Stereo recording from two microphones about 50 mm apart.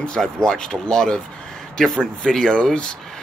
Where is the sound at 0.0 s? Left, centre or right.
Centre.